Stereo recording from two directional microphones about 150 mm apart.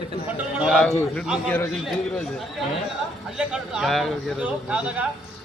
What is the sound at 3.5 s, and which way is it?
Speech, centre (ahead or behind).